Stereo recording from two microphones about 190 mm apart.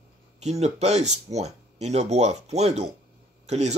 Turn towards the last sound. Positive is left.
turn(degrees=-35)  # may be behind; listen again after turning